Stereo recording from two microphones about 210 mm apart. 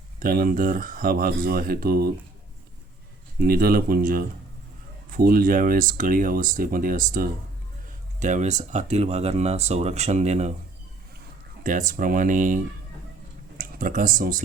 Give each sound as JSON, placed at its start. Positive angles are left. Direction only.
{"t": 0.2, "sound": "speech", "side_deg": -45}
{"t": 3.4, "sound": "speech", "side_deg": -45}
{"t": 11.6, "sound": "speech", "side_deg": -40}
{"t": 13.6, "sound": "speech", "side_deg": -40}